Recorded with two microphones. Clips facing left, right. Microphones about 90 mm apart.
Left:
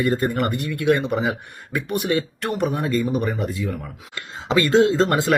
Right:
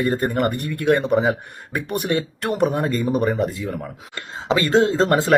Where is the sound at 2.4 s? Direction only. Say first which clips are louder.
Right 4 dB; 40° right (ahead or behind).